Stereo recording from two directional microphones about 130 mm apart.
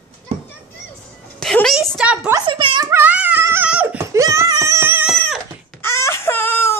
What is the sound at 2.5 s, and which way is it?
Speech, 40° right (ahead or behind).